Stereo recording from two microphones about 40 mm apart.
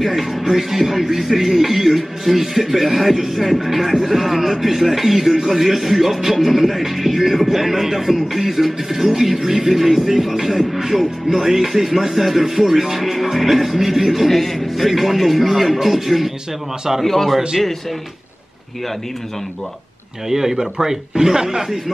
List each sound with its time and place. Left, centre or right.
0.0 s speech: centre
10.8 s music: centre
11.2 s speech: centre
17.0 s a man's voice: centre
20.2 s speech: centre